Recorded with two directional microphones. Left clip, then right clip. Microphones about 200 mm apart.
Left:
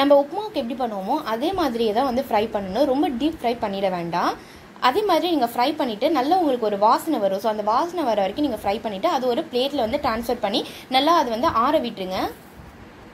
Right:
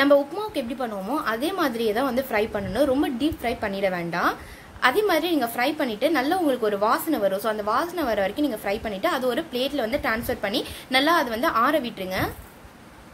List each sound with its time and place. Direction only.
0.0 s a woman's voice: centre (ahead or behind)